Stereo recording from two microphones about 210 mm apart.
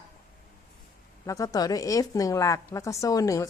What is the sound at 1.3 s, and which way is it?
A woman's voice, 15° left (ahead or behind).